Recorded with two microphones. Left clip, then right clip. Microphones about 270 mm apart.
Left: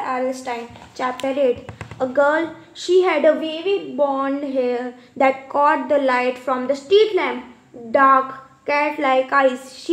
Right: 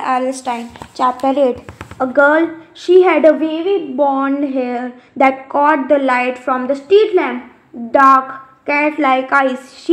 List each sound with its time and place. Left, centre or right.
0.0 s a woman's voice: right